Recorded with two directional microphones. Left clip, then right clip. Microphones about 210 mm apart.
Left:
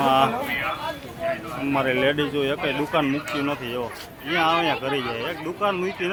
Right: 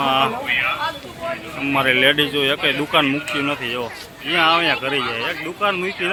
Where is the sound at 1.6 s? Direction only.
Centre (ahead or behind).